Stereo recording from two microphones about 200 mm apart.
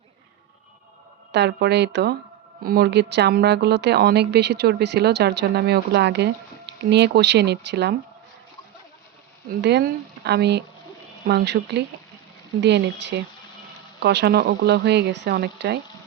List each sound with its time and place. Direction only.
1.3 s a woman's voice: 55° right (ahead or behind)
9.6 s a woman's voice: 55° right (ahead or behind)